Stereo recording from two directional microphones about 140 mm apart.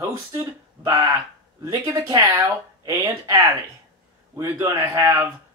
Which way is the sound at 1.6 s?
25° right (ahead or behind).